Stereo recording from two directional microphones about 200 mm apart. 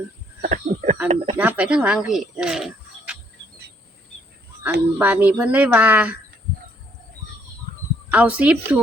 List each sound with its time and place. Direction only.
0.4 s speech: 40° right (ahead or behind)
1.4 s speech: 5° right (ahead or behind)
4.6 s speech: 10° right (ahead or behind)
8.1 s speech: 5° right (ahead or behind)